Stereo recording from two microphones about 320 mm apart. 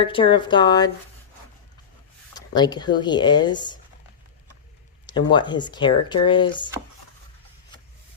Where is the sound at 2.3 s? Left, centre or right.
Centre.